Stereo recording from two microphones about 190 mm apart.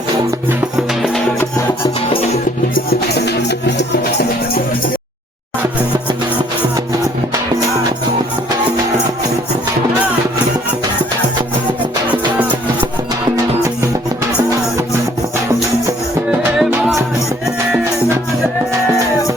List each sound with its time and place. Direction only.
3.8 s music: 55° left (ahead or behind)
16.6 s music: centre (ahead or behind)